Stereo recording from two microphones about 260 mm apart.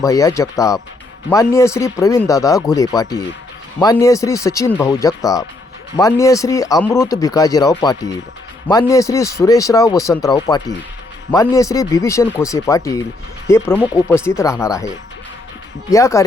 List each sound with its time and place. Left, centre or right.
0.0 s a man's voice: centre
15.9 s a man's voice: centre